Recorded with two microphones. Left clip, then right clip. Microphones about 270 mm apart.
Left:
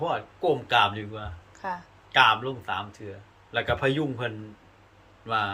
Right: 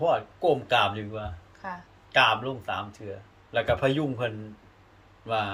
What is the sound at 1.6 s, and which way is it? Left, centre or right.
Speech, left.